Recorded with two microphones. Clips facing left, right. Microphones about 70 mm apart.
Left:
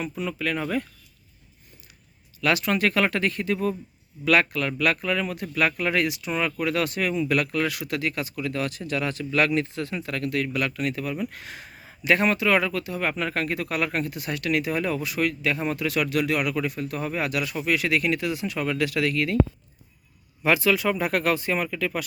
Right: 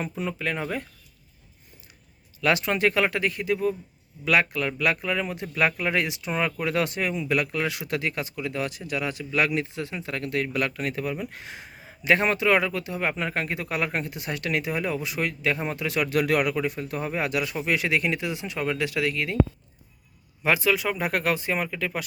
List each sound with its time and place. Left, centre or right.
0.0 s speech: right
2.4 s speech: right
14.7 s speech: centre; by 16.6 s right
16.6 s speech: right
20.4 s speech: centre